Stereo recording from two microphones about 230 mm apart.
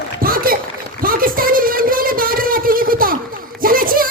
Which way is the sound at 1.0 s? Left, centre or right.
Right.